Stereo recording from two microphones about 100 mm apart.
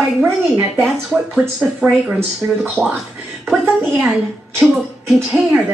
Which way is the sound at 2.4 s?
30° right (ahead or behind).